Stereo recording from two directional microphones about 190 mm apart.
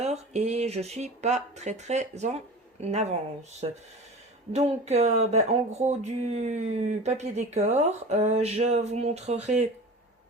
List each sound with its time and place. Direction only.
0.0 s speech: 35° right (ahead or behind)
4.5 s speech: 35° right (ahead or behind)